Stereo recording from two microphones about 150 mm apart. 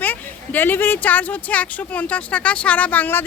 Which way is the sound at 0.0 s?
10° left (ahead or behind).